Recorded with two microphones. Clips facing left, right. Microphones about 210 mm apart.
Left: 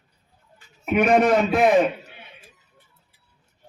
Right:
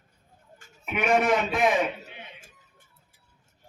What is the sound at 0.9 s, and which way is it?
Speech, 55° left (ahead or behind).